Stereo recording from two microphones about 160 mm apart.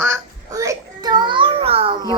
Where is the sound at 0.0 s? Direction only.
20° right (ahead or behind); by 2.1 s 35° right (ahead or behind).